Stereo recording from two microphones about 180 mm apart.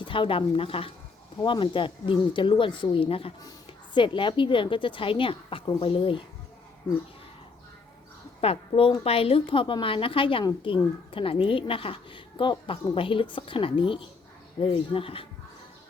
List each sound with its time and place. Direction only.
0.0 s a woman's voice: 30° left (ahead or behind)
8.4 s a woman's voice: 30° left (ahead or behind)